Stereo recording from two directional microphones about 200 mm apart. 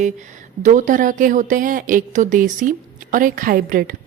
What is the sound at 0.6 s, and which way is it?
A woman's voice, 40° right (ahead or behind).